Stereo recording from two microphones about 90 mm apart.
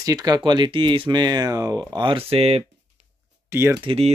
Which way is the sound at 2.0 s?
90° right.